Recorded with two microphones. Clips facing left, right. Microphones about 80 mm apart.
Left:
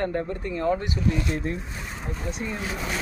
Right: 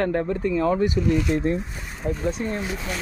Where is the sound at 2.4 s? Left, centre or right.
Right.